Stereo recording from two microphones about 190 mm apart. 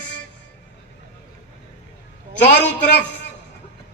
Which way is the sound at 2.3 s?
65° left (ahead or behind).